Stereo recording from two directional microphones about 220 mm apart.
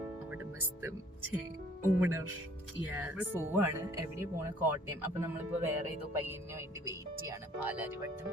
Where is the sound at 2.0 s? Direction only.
10° right (ahead or behind).